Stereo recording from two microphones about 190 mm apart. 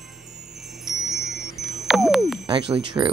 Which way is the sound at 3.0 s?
20° right (ahead or behind).